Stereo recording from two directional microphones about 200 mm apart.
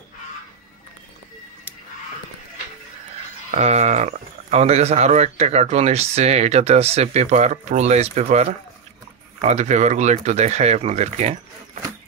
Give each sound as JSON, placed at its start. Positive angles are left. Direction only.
{"t": 3.5, "sound": "speech", "side_deg": -35}